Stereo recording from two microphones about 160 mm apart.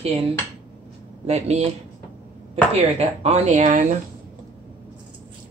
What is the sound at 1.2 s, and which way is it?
Speech, 45° right (ahead or behind).